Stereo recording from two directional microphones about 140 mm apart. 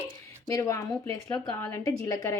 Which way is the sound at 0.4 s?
20° left (ahead or behind).